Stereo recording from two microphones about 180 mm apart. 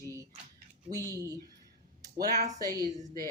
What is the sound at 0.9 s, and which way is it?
Speech, 20° right (ahead or behind).